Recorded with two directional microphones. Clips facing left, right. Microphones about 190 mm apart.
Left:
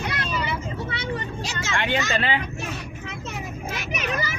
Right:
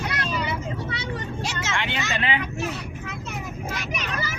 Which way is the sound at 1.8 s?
50° left (ahead or behind).